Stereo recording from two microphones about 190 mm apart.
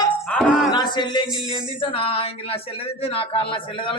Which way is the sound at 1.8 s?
30° left (ahead or behind).